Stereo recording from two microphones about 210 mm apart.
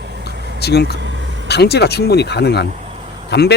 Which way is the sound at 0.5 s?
50° left (ahead or behind).